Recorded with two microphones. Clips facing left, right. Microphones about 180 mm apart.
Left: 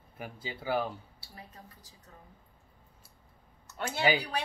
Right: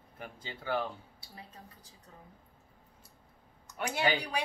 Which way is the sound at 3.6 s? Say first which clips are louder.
Right 1 dB; 10° right (ahead or behind).